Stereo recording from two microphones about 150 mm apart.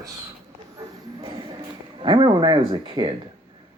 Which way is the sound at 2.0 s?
30° right (ahead or behind).